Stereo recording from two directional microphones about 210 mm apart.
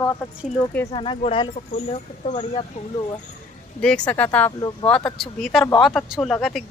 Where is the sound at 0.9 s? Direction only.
25° left (ahead or behind).